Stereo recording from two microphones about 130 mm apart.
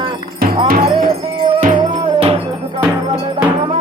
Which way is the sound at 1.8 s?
45° right (ahead or behind).